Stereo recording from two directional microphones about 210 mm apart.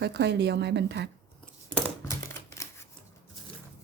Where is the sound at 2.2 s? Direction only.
10° left (ahead or behind).